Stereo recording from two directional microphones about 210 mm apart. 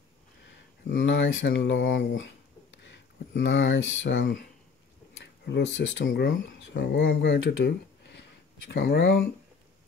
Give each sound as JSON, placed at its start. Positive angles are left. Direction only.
{"t": 1.0, "sound": "speech", "side_deg": 65}
{"t": 3.3, "sound": "speech", "side_deg": 65}